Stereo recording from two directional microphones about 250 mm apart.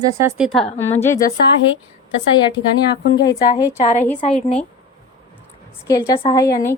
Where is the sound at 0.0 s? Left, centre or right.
Centre.